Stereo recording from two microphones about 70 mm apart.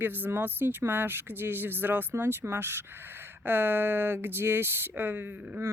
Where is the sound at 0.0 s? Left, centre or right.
Right.